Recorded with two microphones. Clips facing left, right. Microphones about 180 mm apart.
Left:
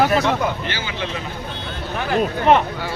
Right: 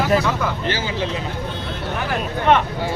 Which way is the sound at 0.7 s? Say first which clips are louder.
Right 4 dB; 35° right (ahead or behind).